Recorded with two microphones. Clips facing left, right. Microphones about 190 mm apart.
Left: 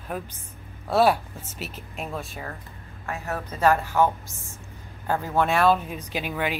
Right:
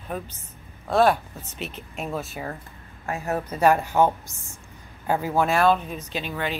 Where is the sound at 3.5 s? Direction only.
15° right (ahead or behind).